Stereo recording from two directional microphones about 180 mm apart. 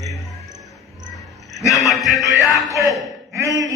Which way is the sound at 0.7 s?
Centre (ahead or behind).